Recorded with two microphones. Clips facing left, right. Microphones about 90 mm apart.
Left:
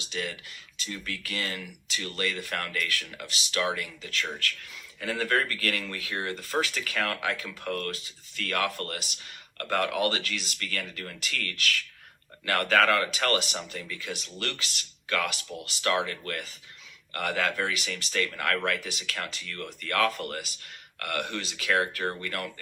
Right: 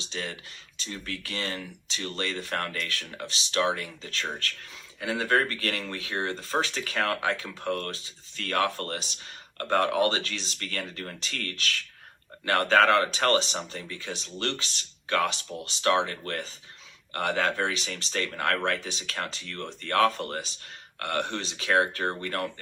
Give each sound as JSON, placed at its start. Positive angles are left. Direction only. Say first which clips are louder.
{"t": 0.0, "sound": "speech", "louder": "left 1 dB", "side_deg": -35}